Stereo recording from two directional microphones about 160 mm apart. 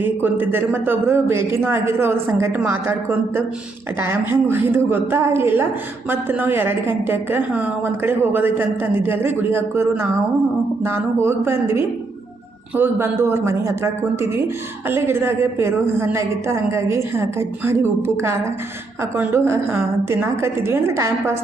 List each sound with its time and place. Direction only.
0.0 s a woman's voice: 10° right (ahead or behind)